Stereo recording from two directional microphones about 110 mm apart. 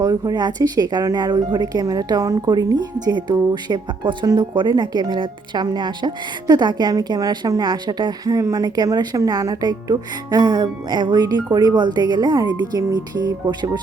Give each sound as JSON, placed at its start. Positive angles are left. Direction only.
{"t": 0.0, "sound": "a woman's voice", "side_deg": -35}